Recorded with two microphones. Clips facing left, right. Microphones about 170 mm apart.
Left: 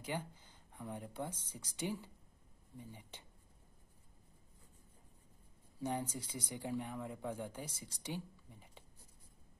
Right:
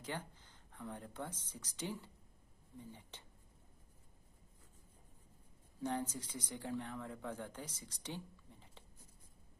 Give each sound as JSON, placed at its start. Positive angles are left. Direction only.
{"t": 0.0, "sound": "speech", "side_deg": 10}
{"t": 5.8, "sound": "speech", "side_deg": 10}